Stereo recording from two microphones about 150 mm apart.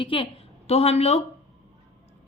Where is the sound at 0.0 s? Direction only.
35° left (ahead or behind).